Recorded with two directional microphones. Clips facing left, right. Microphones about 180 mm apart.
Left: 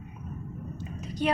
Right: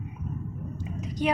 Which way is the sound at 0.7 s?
15° right (ahead or behind).